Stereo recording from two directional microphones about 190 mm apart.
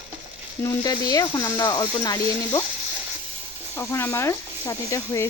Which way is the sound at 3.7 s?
15° left (ahead or behind).